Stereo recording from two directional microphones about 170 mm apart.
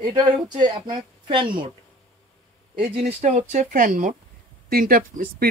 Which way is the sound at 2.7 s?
40° right (ahead or behind).